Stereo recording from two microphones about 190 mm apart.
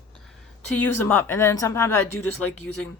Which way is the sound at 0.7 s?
10° left (ahead or behind).